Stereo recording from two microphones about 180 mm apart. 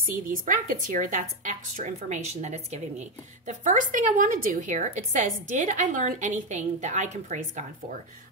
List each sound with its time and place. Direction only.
0.0 s a woman's voice: 45° right (ahead or behind)